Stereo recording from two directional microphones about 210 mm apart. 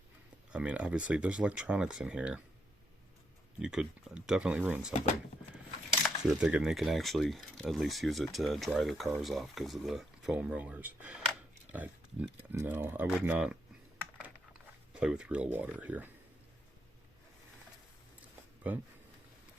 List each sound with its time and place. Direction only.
0.5 s speech: 5° right (ahead or behind)
3.6 s speech: 5° right (ahead or behind)
6.2 s speech: centre (ahead or behind)
14.9 s speech: 5° right (ahead or behind)
18.6 s speech: 5° right (ahead or behind)